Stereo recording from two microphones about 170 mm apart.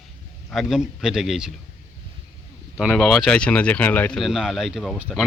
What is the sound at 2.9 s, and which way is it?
Speech, centre (ahead or behind).